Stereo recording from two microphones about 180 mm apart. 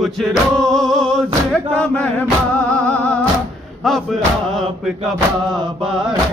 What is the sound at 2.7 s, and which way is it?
Music, 10° left (ahead or behind).